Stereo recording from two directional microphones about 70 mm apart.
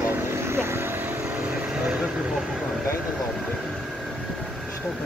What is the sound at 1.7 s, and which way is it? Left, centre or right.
Vehicle, centre.